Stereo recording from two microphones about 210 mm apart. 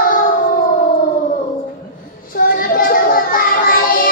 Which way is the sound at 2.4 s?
40° left (ahead or behind).